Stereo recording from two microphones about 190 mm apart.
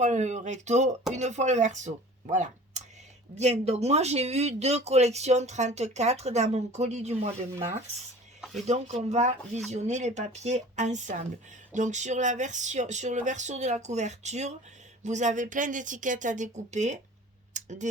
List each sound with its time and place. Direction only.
0.0 s speech: 40° right (ahead or behind)
8.6 s speech: 35° right (ahead or behind)
17.5 s a sound: 40° right (ahead or behind)